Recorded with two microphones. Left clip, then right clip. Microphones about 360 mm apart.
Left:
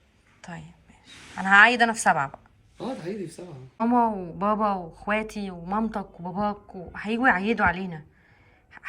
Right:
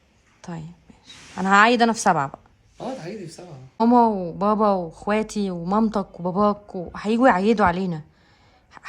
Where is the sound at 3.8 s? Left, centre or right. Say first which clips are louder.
Right 5 dB; centre.